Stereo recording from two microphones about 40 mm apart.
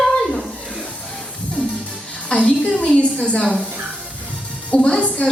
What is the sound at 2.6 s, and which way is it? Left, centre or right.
Speech, left.